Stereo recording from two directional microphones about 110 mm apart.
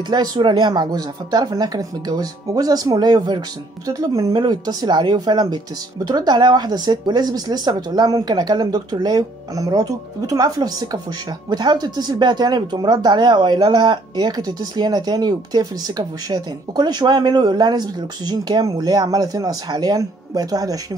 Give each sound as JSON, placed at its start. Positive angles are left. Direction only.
{"t": 0.1, "sound": "speech", "side_deg": -40}